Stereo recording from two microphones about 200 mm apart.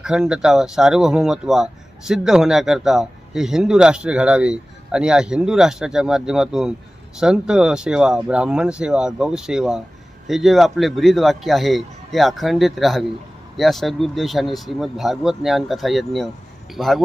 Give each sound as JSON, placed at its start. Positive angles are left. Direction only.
{"t": 0.0, "sound": "speech", "side_deg": -5}